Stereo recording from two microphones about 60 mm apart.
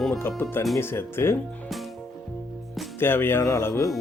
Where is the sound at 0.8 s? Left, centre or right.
Left.